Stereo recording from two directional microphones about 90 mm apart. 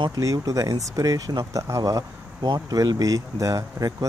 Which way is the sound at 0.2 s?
40° right (ahead or behind).